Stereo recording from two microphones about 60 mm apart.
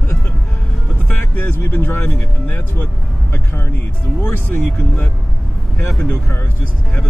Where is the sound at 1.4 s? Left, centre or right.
Left.